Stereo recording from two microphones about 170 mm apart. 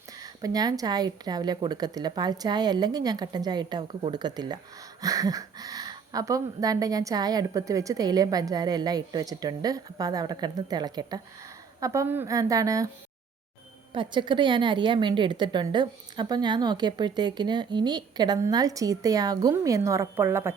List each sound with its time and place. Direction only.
0.2 s a woman's voice: 20° right (ahead or behind)
13.9 s a woman's voice: 30° right (ahead or behind)